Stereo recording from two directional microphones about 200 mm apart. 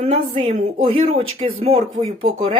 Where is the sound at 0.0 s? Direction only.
35° right (ahead or behind).